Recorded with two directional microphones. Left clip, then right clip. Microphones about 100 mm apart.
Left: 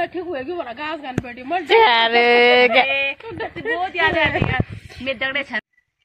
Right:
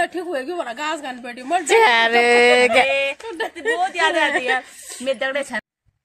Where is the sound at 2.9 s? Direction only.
55° right (ahead or behind).